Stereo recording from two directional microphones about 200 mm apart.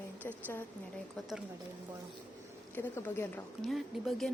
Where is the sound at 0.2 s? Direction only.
10° left (ahead or behind).